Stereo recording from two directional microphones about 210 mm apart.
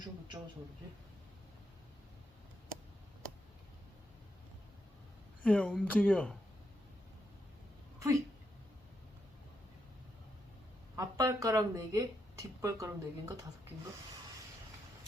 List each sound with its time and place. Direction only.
5.4 s speech: 5° left (ahead or behind)
10.9 s speech: 15° right (ahead or behind)